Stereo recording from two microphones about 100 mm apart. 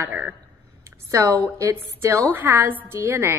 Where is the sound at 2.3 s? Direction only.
20° right (ahead or behind).